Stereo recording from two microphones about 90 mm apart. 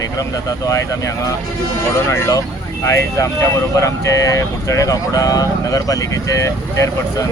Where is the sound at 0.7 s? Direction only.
35° left (ahead or behind).